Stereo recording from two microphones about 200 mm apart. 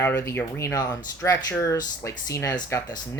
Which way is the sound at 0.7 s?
20° left (ahead or behind).